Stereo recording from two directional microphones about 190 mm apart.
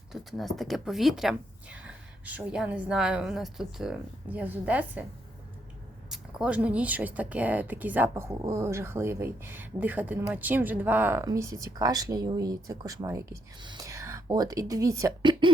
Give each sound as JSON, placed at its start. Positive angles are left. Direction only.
{"t": 0.1, "sound": "speech", "side_deg": 0}
{"t": 6.1, "sound": "speech", "side_deg": -5}